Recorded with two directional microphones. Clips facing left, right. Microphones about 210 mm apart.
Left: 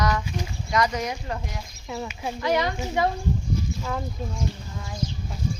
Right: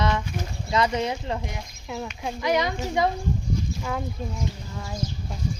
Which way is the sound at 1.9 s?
5° left (ahead or behind).